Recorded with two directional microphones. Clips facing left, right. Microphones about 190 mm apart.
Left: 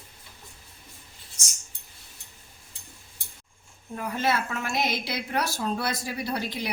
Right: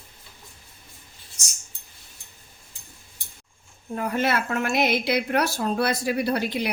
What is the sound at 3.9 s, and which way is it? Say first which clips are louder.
A woman's voice: right 3 dB; 60° right (ahead or behind).